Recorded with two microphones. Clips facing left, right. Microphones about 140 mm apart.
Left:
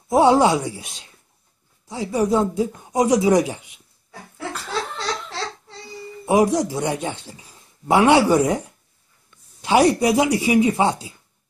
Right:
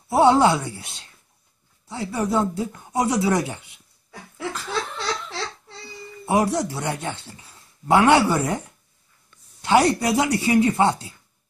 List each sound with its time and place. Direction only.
0.1 s a man's voice: 15° left (ahead or behind)
6.2 s a man's voice: 15° left (ahead or behind)